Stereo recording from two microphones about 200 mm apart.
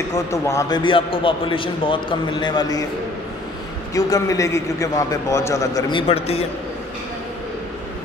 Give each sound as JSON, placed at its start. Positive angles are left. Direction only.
{"t": 0.1, "sound": "a man's voice", "side_deg": 15}
{"t": 3.9, "sound": "a man's voice", "side_deg": 15}